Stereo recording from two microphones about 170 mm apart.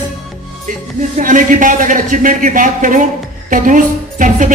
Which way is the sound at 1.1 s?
50° right (ahead or behind).